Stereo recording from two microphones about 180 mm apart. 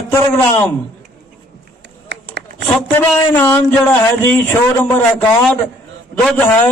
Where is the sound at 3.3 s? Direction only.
10° left (ahead or behind).